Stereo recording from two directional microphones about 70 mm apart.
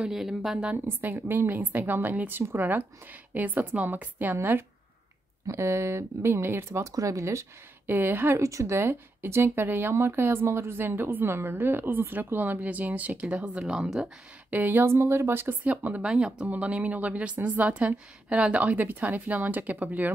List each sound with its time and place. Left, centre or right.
0.0 s speech: centre
0.8 s a woman's voice: right
6.9 s speech: right
8.4 s speech: right; by 13.5 s centre
13.6 s speech: centre
14.5 s a woman's voice: right
15.0 s speech: right
15.6 s a woman's voice: right
16.1 s a woman's voice: centre